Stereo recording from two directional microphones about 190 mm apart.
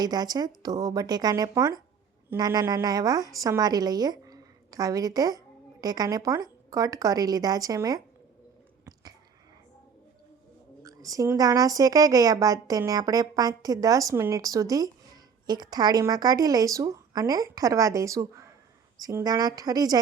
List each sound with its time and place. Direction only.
0.0 s speech: 20° right (ahead or behind)
10.8 s speech: 20° right (ahead or behind)